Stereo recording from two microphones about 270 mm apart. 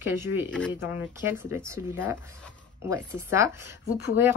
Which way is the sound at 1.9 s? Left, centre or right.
Centre.